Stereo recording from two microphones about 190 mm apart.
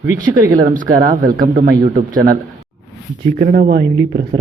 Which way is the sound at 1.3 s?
45° right (ahead or behind).